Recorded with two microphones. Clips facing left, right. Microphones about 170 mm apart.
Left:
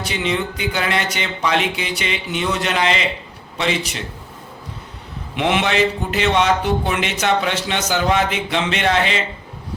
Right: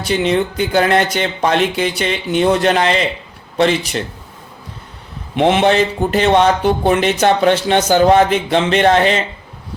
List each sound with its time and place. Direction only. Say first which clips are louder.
0.1 s speech: right 8 dB; 40° right (ahead or behind)
5.4 s speech: right 5 dB; 35° right (ahead or behind)